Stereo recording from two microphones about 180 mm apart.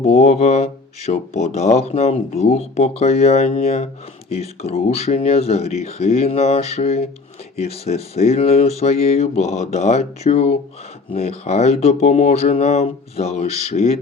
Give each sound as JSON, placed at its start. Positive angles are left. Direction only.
{"t": 0.0, "sound": "speech", "side_deg": 35}